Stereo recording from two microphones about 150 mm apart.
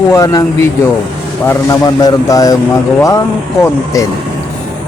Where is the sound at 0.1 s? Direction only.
20° left (ahead or behind).